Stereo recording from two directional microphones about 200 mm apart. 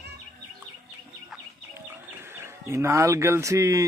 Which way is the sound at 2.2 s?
10° right (ahead or behind).